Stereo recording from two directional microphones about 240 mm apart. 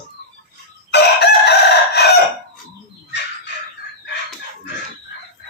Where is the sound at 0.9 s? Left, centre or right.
Left.